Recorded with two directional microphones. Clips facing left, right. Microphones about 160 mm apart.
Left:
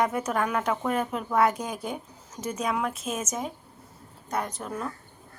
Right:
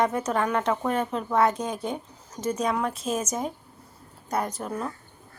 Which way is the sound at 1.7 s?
25° right (ahead or behind).